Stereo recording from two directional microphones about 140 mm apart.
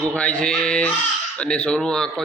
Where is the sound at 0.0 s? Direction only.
10° left (ahead or behind).